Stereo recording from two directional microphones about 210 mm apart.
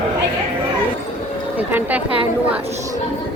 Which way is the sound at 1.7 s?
10° right (ahead or behind).